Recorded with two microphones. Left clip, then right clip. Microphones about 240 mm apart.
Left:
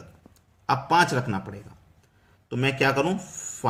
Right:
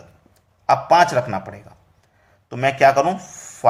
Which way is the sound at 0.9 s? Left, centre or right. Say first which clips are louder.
Right 6 dB; centre.